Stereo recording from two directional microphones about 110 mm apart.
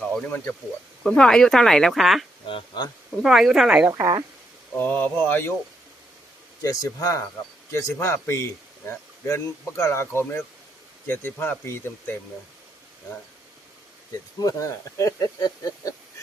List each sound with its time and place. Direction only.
0.3 s speech: 15° left (ahead or behind)
1.0 s speech: 5° left (ahead or behind)
2.5 s speech: 45° left (ahead or behind)
3.2 s speech: 5° right (ahead or behind)
4.8 s speech: 15° left (ahead or behind)
6.6 s speech: 30° left (ahead or behind)
14.4 s speech: 30° left (ahead or behind)